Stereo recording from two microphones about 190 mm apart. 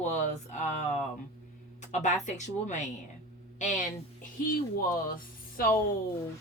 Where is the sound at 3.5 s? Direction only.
40° left (ahead or behind).